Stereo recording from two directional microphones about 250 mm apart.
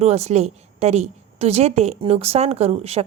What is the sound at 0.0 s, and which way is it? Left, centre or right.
A woman's voice, right.